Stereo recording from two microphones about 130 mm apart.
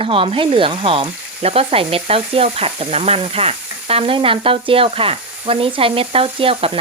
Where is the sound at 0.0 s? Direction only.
45° right (ahead or behind).